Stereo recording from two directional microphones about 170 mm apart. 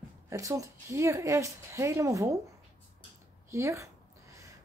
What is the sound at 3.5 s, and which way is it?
Speech, 15° right (ahead or behind).